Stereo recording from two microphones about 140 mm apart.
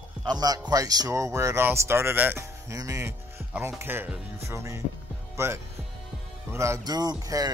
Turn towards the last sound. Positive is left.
turn(degrees=-25)  # may be behind; listen again after turning